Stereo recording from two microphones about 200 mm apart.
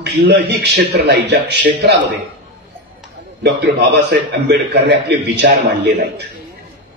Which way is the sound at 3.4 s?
55° right (ahead or behind).